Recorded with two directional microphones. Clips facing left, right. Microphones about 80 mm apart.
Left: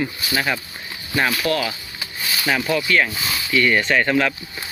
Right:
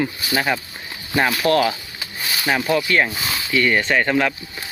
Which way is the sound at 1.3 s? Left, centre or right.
Right.